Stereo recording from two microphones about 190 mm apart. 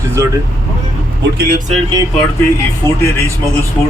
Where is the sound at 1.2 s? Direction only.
65° right (ahead or behind).